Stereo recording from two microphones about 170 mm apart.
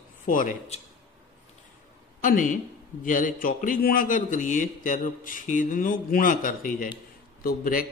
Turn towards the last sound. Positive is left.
turn(degrees=55)  # may be behind; listen again after turning